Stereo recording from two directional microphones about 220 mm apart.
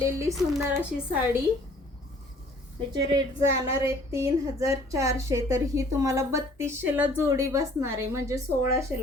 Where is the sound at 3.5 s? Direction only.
10° right (ahead or behind).